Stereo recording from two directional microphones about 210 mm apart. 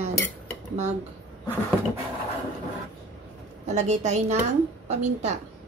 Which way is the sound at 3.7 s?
35° right (ahead or behind).